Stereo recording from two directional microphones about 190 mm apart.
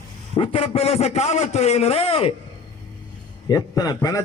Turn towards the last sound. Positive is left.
turn(degrees=20)  # may be behind; listen again after turning